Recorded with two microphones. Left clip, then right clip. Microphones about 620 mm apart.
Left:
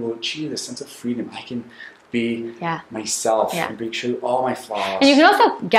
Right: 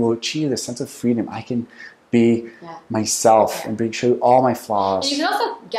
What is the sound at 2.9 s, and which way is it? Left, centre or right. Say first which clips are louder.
Speech: right 8 dB; right.